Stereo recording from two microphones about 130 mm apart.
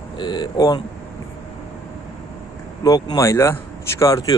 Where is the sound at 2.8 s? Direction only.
25° left (ahead or behind).